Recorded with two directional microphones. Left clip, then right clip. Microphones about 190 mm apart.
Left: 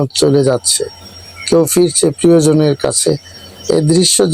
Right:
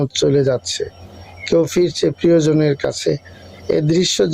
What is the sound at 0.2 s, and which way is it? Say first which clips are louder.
Speech: left 4 dB; 30° left (ahead or behind).